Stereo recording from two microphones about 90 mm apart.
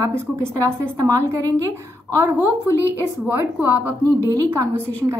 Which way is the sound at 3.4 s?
25° right (ahead or behind).